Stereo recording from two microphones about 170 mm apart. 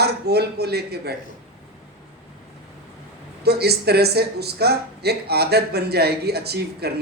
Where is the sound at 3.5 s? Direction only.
70° right (ahead or behind).